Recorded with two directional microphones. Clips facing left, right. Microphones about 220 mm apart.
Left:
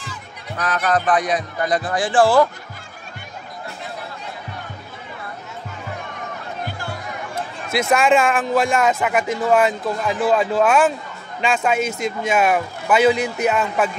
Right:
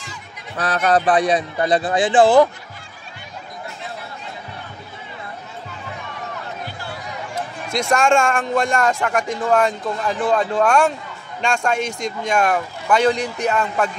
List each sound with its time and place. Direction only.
0.6 s a man's voice: 30° right (ahead or behind)
7.7 s speech: 5° left (ahead or behind)